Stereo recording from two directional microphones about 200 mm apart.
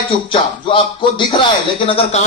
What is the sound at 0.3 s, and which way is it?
Music, 25° left (ahead or behind).